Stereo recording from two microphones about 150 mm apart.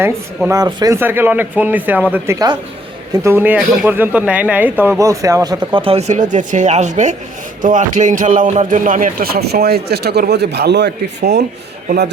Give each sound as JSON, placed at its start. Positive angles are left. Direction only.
{"t": 0.0, "sound": "speech", "side_deg": -15}
{"t": 5.8, "sound": "a man's voice", "side_deg": -45}